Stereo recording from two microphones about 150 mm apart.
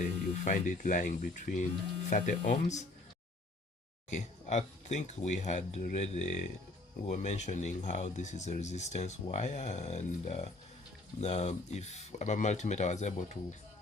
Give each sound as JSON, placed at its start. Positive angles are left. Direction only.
{"t": 0.0, "sound": "speech", "side_deg": 55}
{"t": 4.1, "sound": "speech", "side_deg": 50}